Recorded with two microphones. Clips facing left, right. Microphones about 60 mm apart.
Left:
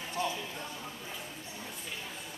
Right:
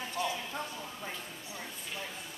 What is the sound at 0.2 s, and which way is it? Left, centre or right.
Clip-clop, left.